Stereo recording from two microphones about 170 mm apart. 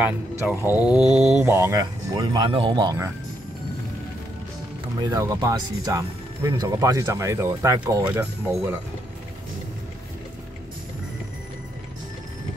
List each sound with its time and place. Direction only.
0.7 s mantra: 5° right (ahead or behind)
1.4 s speech: 15° right (ahead or behind)
5.0 s speech: 20° right (ahead or behind)